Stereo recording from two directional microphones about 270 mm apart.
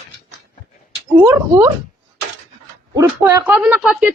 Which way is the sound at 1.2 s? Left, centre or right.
Centre.